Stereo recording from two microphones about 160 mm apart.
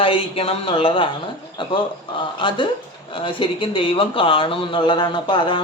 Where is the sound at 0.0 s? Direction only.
35° left (ahead or behind).